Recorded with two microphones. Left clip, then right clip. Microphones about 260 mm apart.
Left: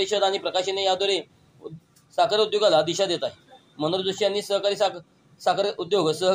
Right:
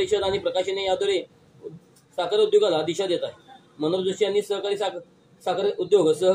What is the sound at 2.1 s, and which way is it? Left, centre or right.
A man's voice, left.